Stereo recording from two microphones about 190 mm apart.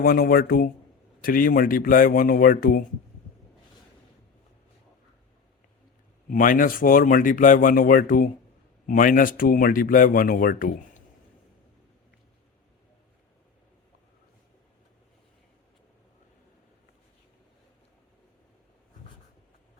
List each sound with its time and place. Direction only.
0.0 s speech: 50° left (ahead or behind)
6.3 s speech: 45° left (ahead or behind)